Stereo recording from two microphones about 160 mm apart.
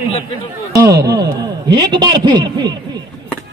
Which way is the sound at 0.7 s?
20° right (ahead or behind).